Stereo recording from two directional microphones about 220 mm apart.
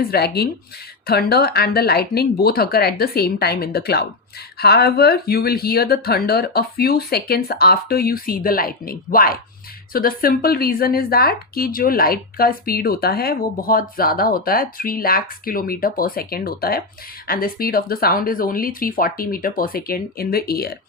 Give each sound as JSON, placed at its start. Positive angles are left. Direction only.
{"t": 0.0, "sound": "speech", "side_deg": 45}